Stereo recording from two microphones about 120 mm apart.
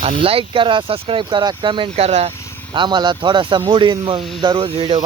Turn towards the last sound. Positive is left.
turn(degrees=-45)  # may be behind; listen again after turning